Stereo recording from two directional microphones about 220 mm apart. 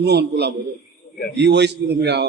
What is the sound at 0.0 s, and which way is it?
A man's voice, 50° right (ahead or behind).